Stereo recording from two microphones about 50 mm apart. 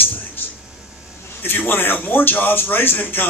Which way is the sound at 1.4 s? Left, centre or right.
Left.